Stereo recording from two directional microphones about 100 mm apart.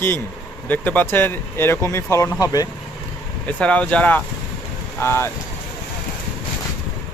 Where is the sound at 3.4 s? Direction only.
10° left (ahead or behind).